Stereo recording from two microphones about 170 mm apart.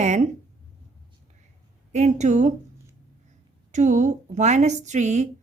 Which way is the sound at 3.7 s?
45° right (ahead or behind).